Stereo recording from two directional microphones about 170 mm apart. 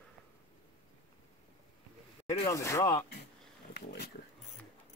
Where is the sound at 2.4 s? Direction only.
20° left (ahead or behind).